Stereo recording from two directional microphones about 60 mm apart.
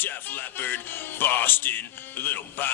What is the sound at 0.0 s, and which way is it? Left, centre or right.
Music, left.